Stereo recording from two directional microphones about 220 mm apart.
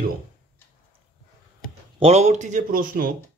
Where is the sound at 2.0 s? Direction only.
30° right (ahead or behind).